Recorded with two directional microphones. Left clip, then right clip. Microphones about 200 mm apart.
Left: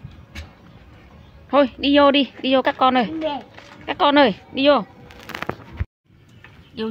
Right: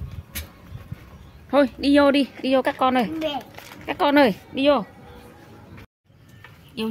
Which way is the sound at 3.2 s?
40° left (ahead or behind).